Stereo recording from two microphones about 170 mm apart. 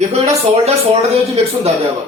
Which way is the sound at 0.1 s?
40° right (ahead or behind).